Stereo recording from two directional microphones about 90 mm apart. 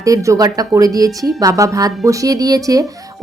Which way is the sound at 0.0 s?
40° right (ahead or behind).